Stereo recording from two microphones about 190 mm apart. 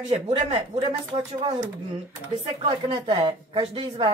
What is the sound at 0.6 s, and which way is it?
A woman's voice, 25° right (ahead or behind).